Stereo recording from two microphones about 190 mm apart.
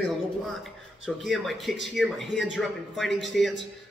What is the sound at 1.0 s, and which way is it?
Speech, centre (ahead or behind).